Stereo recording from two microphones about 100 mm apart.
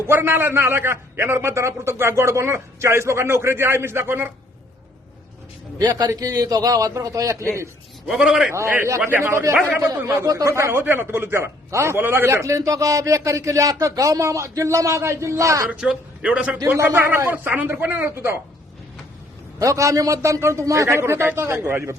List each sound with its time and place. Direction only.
0.1 s a man's voice: 20° right (ahead or behind)
5.8 s a man's voice: 40° right (ahead or behind)
8.0 s a man's voice: 5° right (ahead or behind)
8.7 s a man's voice: 20° right (ahead or behind)
9.8 s a man's voice: 30° right (ahead or behind)
15.7 s a man's voice: 10° right (ahead or behind)
16.6 s a man's voice: 30° right (ahead or behind)
19.5 s a man's voice: 30° right (ahead or behind)